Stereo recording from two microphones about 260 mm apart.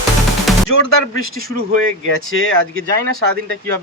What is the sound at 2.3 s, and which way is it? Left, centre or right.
Speech, left.